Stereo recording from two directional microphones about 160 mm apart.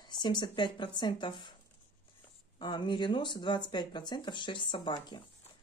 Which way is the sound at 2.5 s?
30° left (ahead or behind).